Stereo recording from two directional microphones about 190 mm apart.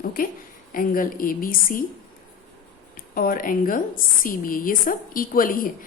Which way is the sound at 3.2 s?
45° left (ahead or behind).